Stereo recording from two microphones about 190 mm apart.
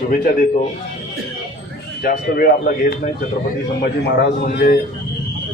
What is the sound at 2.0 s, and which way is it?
Speech, 50° left (ahead or behind).